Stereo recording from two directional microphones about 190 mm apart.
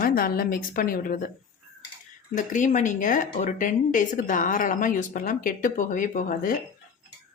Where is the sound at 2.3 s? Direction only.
40° left (ahead or behind).